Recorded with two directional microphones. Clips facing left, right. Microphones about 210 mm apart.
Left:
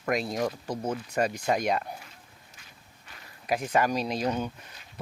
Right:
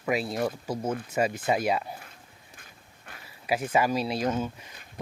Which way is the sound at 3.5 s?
5° right (ahead or behind).